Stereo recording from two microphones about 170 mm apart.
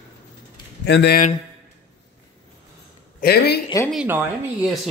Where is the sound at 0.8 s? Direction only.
85° left.